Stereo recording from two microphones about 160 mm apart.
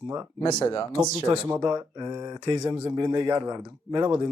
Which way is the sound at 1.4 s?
15° right (ahead or behind).